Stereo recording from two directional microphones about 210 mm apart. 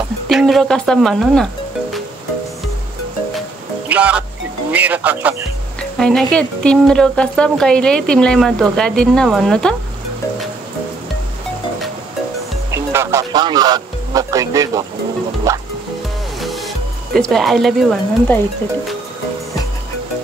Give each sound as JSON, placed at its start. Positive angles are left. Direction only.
{"t": 0.3, "sound": "speech", "side_deg": 0}
{"t": 3.9, "sound": "speech", "side_deg": -5}
{"t": 12.7, "sound": "speech", "side_deg": -10}
{"t": 16.3, "sound": "speech", "side_deg": 0}